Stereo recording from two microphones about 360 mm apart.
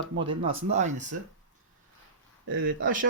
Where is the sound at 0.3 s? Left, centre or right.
Centre.